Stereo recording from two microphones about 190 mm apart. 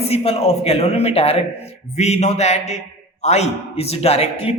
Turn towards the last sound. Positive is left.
turn(degrees=30)  # may be behind; listen again after turning